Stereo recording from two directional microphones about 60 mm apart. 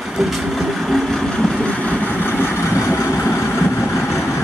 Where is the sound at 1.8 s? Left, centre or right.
Left.